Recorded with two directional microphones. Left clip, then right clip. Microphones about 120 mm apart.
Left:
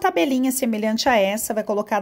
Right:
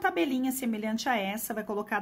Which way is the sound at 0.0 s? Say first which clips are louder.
Left 8 dB; 45° left (ahead or behind).